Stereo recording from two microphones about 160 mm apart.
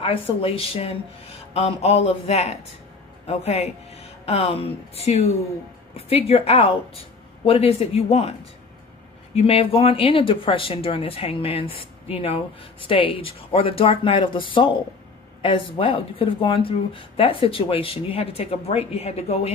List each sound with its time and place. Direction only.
0.0 s speech: 35° left (ahead or behind)